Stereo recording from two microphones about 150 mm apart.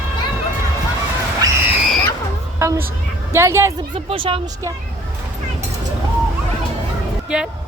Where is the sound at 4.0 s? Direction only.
40° right (ahead or behind).